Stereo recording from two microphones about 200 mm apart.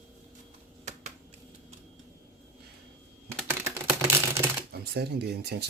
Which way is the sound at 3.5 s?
15° right (ahead or behind).